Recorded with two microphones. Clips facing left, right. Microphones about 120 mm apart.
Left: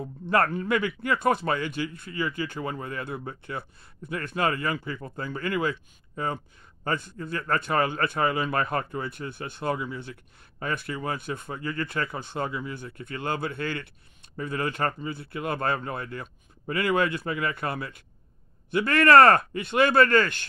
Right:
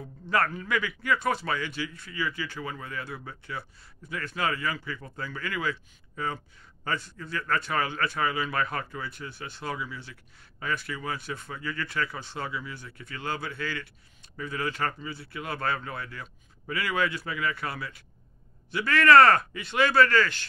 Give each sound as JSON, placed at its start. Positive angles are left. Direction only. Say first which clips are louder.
{"t": 0.3, "sound": "speech", "louder": "left 3 dB", "side_deg": 50}